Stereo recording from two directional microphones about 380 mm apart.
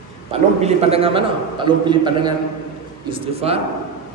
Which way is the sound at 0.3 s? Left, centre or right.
Centre.